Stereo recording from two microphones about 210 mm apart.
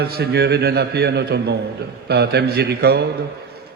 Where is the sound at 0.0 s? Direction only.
50° right (ahead or behind).